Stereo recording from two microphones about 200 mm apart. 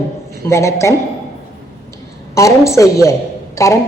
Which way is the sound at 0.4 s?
15° left (ahead or behind).